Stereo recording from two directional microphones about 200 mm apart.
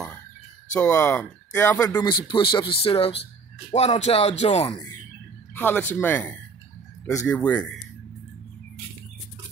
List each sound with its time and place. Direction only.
0.7 s speech: 10° left (ahead or behind)
2.0 s speech: 20° left (ahead or behind)
5.5 s speech: 10° left (ahead or behind)